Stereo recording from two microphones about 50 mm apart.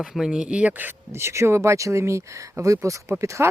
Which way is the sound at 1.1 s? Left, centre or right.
Right.